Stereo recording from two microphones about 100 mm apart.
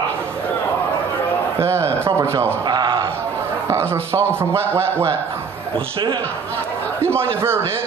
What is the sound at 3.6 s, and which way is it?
A man's voice, 25° right (ahead or behind).